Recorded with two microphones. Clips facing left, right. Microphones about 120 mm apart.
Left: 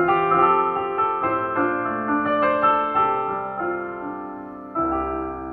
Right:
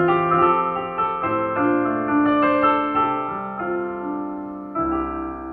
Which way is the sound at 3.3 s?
15° left (ahead or behind).